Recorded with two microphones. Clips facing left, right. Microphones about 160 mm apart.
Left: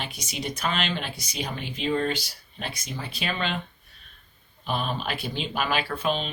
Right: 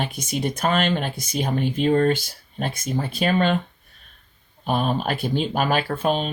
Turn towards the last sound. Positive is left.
turn(degrees=-50)  # may be behind; listen again after turning